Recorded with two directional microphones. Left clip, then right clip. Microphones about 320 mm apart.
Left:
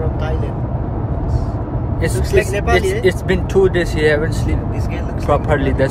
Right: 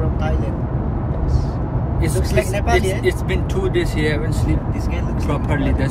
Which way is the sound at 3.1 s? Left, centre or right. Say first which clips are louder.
Left 4 dB; left.